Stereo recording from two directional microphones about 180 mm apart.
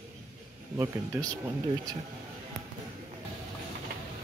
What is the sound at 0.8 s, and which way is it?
Speech, 15° right (ahead or behind).